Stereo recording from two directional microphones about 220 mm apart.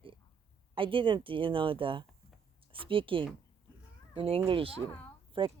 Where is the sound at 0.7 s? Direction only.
25° right (ahead or behind).